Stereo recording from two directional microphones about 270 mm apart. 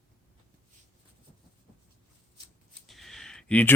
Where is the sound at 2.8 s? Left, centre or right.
Centre.